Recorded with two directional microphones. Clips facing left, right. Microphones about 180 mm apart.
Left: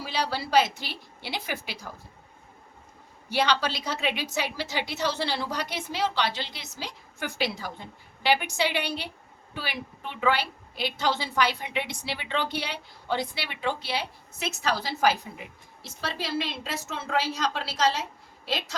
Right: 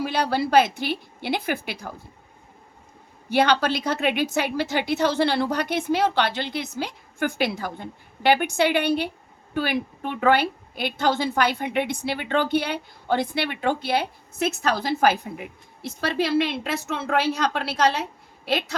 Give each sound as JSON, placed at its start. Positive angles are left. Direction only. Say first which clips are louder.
{"t": 0.0, "sound": "a woman's voice", "louder": "right 7 dB", "side_deg": -55}
{"t": 3.2, "sound": "a woman's voice", "louder": "right 6 dB", "side_deg": -55}